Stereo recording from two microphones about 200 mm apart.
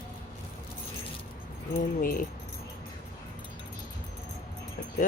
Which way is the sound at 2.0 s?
45° left (ahead or behind).